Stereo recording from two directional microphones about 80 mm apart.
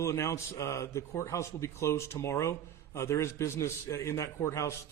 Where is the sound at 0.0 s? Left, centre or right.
Left.